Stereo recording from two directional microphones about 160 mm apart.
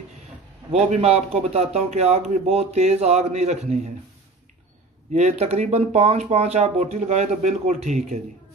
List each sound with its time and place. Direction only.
0.7 s speech: 40° right (ahead or behind)
5.1 s speech: 40° right (ahead or behind)